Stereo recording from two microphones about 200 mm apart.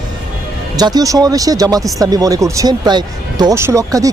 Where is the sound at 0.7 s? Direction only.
20° right (ahead or behind).